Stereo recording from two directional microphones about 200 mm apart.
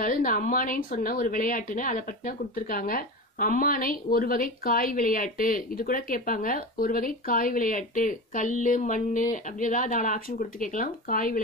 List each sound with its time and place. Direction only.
0.0 s speech: 45° left (ahead or behind)